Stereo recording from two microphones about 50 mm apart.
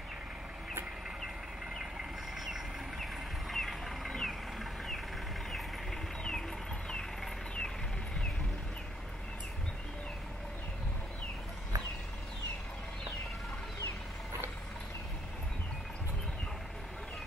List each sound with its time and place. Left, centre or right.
1.8 s vehicle: centre